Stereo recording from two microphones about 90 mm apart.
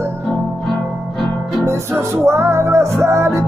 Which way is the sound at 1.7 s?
30° right (ahead or behind).